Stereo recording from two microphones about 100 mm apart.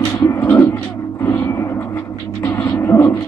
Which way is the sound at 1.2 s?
30° left (ahead or behind).